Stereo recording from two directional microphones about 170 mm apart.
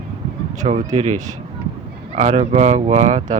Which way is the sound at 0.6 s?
45° right (ahead or behind).